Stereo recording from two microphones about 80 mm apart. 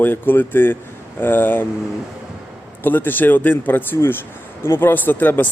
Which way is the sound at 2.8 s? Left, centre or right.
Left.